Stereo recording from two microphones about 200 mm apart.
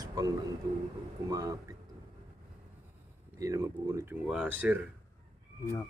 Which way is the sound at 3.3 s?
15° right (ahead or behind).